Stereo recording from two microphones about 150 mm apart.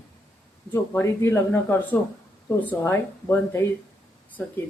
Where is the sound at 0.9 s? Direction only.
15° left (ahead or behind).